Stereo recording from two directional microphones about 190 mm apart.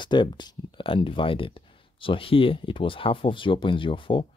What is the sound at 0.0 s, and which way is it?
Speech, 25° left (ahead or behind).